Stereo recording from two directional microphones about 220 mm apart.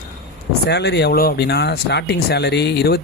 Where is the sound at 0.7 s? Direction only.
50° left (ahead or behind).